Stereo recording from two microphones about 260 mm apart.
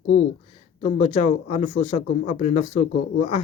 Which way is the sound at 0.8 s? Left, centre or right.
Left.